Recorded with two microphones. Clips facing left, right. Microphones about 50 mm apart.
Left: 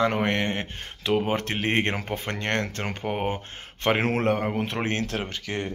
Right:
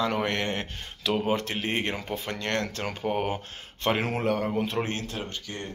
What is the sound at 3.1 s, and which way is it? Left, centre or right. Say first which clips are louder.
Speech: right 1 dB; left.